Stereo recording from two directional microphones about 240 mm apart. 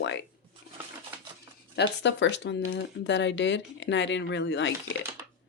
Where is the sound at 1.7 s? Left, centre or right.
Left.